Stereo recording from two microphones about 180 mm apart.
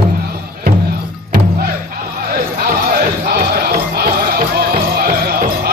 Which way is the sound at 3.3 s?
60° right (ahead or behind).